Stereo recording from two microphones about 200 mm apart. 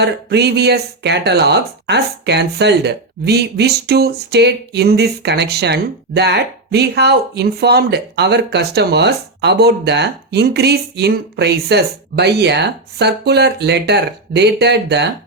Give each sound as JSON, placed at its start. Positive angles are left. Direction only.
{"t": 0.0, "sound": "speech", "side_deg": -55}